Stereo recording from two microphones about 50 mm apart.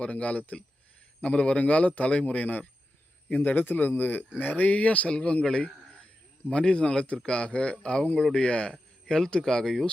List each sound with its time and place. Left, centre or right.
0.0 s speech: left; by 9.8 s centre